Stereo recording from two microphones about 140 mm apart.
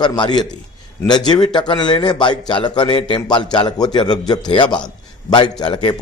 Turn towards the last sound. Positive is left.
turn(degrees=35)  # may be behind; listen again after turning